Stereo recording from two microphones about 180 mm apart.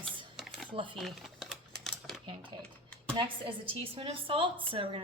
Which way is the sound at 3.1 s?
30° right (ahead or behind).